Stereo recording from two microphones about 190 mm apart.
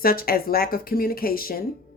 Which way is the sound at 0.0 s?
50° left (ahead or behind).